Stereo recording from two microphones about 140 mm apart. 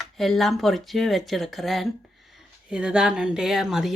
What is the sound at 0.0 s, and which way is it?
Speech, centre (ahead or behind).